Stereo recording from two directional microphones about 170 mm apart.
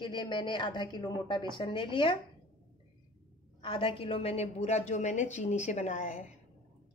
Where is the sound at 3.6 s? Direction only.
30° left (ahead or behind).